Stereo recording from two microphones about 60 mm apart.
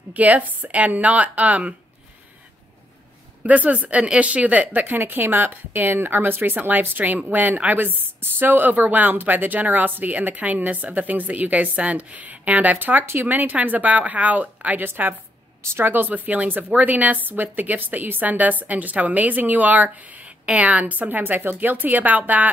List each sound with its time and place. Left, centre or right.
0.1 s a woman's voice: right
3.4 s a woman's voice: right
13.0 s speech: right
13.3 s a woman's voice: right